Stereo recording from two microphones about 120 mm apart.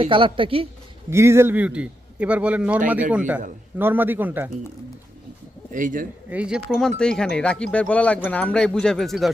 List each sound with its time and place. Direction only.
0.0 s a woman's voice: 50° right (ahead or behind)
1.1 s a man's voice: 20° right (ahead or behind)
5.7 s speech: 90° right
6.3 s speech: 10° right (ahead or behind)